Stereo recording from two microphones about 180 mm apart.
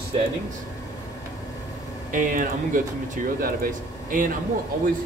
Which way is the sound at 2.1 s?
45° right (ahead or behind).